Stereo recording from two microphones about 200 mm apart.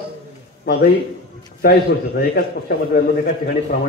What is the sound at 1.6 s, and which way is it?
A man's voice, 50° left (ahead or behind).